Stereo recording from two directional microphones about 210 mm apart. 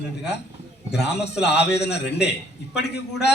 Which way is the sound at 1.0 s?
55° left (ahead or behind).